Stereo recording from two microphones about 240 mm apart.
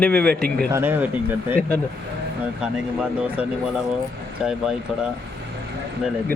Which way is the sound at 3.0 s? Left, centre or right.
Centre.